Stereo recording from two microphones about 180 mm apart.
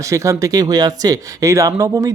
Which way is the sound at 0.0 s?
15° right (ahead or behind).